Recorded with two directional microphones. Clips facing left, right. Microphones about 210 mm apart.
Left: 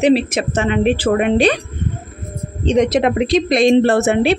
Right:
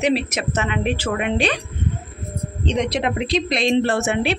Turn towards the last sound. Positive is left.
turn(degrees=35)  # may be behind; listen again after turning